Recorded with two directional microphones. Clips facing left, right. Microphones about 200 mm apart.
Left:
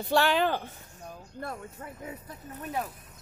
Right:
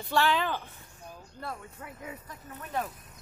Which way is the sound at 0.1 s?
40° left (ahead or behind).